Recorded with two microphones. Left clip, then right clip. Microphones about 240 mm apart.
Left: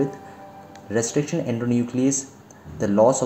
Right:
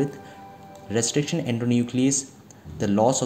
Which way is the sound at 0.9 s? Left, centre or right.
Right.